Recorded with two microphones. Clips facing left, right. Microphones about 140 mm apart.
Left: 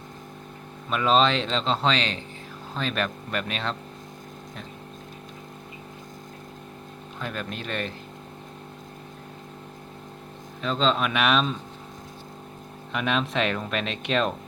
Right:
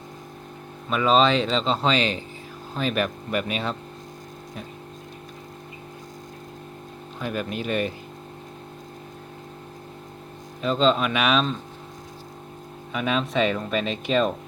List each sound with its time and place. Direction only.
0.9 s speech: centre (ahead or behind)
7.2 s speech: 10° right (ahead or behind)
10.6 s speech: 5° right (ahead or behind)
12.9 s speech: centre (ahead or behind)